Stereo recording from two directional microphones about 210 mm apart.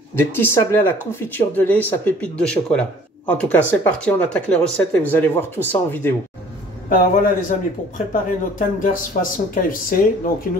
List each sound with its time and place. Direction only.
0.1 s speech: 10° left (ahead or behind)
6.9 s speech: 40° left (ahead or behind)